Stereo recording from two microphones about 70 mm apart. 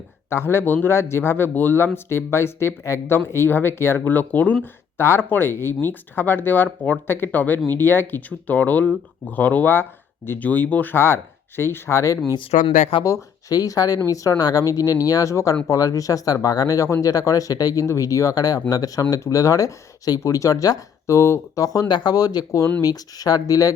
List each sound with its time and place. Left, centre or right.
0.3 s speech: left
4.6 s speech: left
13.1 s speech: left
21.2 s speech: left
21.5 s speech: left